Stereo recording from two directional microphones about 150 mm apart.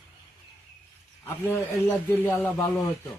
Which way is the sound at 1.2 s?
15° left (ahead or behind).